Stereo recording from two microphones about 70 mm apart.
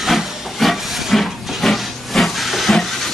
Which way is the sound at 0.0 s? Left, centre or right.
Centre.